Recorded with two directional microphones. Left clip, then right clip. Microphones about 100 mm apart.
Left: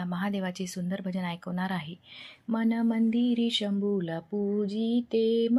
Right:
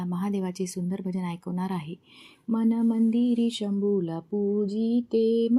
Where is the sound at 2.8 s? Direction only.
30° right (ahead or behind).